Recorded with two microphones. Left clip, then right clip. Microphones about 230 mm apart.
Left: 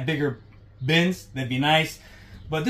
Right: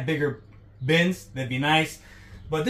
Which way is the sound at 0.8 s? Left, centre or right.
Centre.